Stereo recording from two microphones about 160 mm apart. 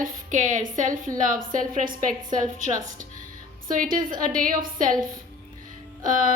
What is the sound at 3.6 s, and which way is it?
A woman's voice, 60° right (ahead or behind).